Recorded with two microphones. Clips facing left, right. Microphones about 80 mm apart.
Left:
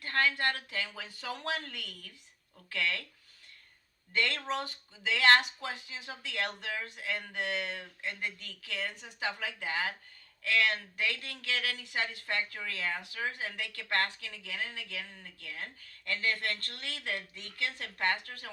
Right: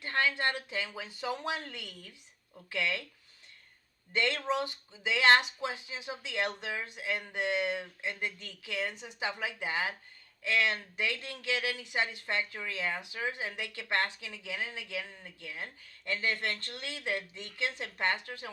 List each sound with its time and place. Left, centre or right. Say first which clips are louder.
0.0 s speech: even; centre
4.1 s speech: right 2 dB; right